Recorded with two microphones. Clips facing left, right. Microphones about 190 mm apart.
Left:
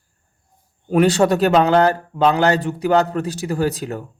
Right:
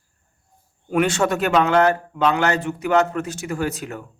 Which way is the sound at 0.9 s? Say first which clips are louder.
Left 5 dB; 35° left (ahead or behind).